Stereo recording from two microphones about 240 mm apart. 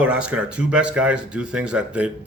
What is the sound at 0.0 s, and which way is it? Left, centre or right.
Speech, centre.